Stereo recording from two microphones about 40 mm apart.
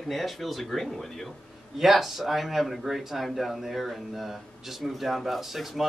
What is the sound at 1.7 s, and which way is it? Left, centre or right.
Speech, centre.